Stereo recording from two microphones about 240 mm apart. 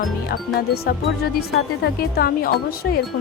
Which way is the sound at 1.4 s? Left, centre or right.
Left.